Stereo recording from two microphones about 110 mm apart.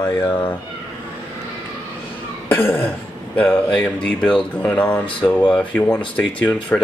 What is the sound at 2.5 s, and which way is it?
Cough, 15° left (ahead or behind).